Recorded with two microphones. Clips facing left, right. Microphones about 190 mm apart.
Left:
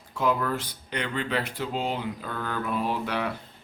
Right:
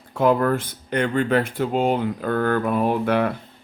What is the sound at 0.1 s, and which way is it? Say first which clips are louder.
Speech: right 8 dB; 55° right (ahead or behind).